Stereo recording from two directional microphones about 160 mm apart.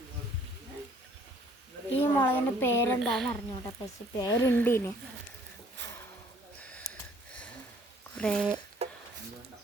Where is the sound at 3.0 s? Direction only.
Centre (ahead or behind).